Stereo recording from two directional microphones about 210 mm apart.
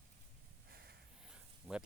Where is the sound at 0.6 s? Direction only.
50° right (ahead or behind).